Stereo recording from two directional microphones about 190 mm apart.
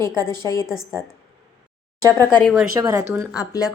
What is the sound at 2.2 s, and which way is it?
Speech, 5° left (ahead or behind).